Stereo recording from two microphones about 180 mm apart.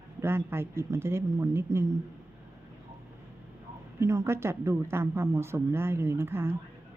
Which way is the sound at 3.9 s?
15° right (ahead or behind).